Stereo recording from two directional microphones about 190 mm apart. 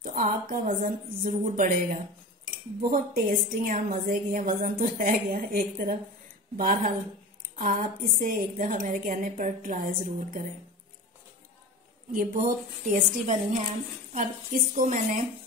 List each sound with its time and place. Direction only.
0.0 s a woman's voice: 45° right (ahead or behind)
2.8 s a woman's voice: 50° right (ahead or behind)
12.1 s a woman's voice: 45° right (ahead or behind)